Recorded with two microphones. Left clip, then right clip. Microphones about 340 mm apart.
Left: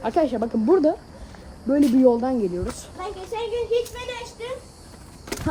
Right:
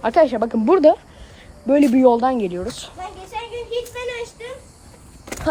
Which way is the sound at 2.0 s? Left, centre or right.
Centre.